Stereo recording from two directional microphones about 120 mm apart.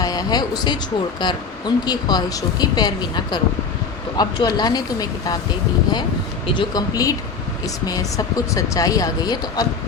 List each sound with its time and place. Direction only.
0.0 s speech: 30° left (ahead or behind)
6.5 s speech: 35° left (ahead or behind)